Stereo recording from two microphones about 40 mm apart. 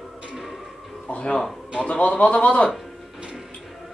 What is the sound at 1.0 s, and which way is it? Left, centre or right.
A man's voice, left.